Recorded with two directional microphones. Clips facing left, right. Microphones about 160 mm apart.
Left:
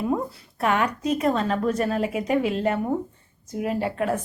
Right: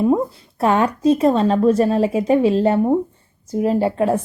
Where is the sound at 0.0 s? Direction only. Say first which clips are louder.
Right 8 dB; 25° right (ahead or behind).